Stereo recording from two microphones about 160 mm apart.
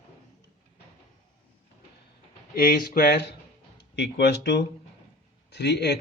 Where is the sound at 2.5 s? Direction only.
65° left (ahead or behind).